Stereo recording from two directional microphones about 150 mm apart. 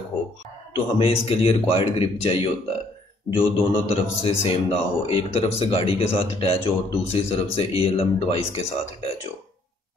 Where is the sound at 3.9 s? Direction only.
40° left (ahead or behind).